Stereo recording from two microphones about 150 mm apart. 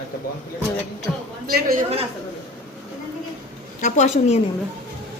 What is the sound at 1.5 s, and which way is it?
Speech, 90° right.